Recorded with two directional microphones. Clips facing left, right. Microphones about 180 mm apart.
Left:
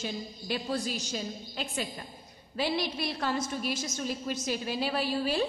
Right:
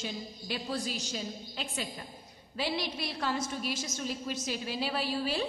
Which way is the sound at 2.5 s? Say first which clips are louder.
Left 3 dB; 50° left (ahead or behind).